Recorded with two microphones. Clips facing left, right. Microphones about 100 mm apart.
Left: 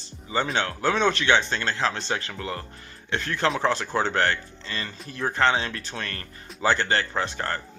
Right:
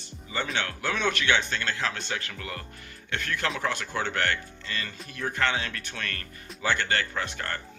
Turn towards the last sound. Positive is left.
turn(degrees=30)  # may be behind; listen again after turning